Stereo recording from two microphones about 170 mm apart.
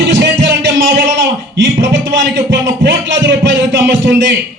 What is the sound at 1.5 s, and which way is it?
A man's voice, 90° right.